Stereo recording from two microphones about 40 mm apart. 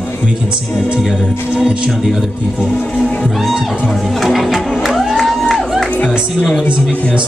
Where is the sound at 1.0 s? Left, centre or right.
Centre.